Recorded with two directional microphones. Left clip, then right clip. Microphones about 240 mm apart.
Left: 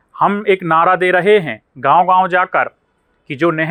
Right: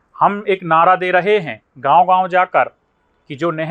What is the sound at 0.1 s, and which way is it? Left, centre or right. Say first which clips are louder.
A man's voice: left 1 dB; left.